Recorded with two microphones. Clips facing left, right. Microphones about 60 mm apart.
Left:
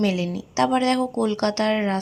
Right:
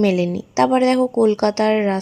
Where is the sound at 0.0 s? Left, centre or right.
Right.